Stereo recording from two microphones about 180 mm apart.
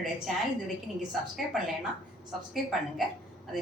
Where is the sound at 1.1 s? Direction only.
Centre (ahead or behind).